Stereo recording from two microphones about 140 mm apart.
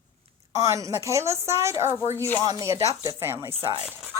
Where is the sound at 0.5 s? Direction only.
25° right (ahead or behind).